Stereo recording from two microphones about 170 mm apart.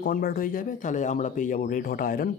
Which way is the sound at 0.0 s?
60° left (ahead or behind).